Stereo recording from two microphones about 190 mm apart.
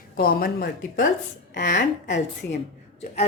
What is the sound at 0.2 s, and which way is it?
A woman's voice, 50° left (ahead or behind).